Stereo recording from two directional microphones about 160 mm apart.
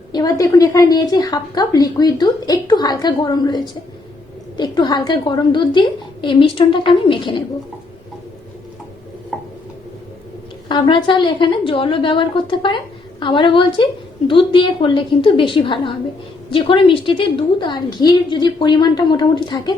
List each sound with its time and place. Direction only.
0.1 s a woman's voice: 25° left (ahead or behind)
10.7 s a woman's voice: 30° left (ahead or behind)